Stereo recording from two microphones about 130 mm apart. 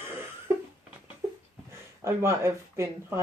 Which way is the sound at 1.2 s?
25° right (ahead or behind).